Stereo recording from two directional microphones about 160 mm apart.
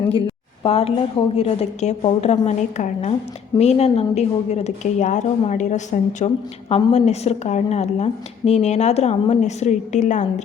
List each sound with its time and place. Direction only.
0.6 s a woman's voice: 40° left (ahead or behind)